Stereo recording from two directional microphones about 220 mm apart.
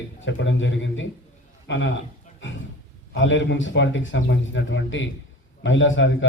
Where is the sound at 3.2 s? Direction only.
60° left (ahead or behind).